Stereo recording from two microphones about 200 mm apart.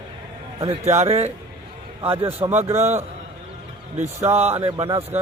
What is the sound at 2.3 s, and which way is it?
Speech, 10° right (ahead or behind).